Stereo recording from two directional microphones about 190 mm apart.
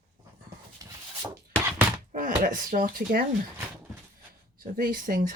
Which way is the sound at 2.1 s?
45° right (ahead or behind).